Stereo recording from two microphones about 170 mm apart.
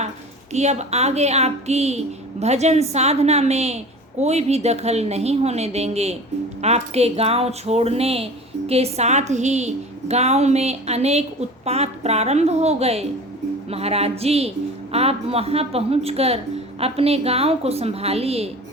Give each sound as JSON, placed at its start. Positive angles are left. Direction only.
{"t": 0.5, "sound": "speech", "side_deg": -40}